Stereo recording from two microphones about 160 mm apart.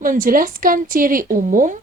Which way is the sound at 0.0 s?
60° right (ahead or behind).